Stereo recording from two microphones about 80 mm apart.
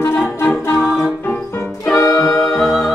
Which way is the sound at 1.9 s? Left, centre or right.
Left.